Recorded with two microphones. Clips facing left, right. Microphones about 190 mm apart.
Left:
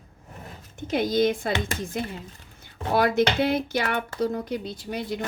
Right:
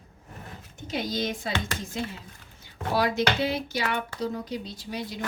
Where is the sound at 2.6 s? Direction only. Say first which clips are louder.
Left 3 dB; 55° left (ahead or behind).